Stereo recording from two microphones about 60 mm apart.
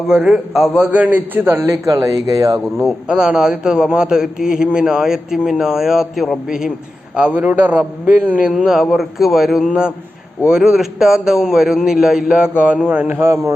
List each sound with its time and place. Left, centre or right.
0.1 s a man's voice: centre
0.9 s a man's voice: right
1.7 s speech: right
2.7 s a man's voice: centre
7.2 s a man's voice: right
8.5 s a man's voice: centre; by 13.1 s right
13.1 s a man's voice: right